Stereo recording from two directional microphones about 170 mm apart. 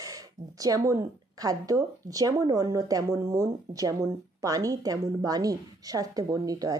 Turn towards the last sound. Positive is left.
turn(degrees=-20)  # may be behind; listen again after turning